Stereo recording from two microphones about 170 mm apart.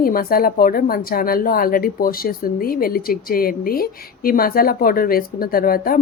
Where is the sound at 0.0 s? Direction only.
60° left (ahead or behind).